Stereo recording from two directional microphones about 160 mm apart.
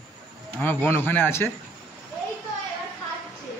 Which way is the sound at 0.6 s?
10° left (ahead or behind).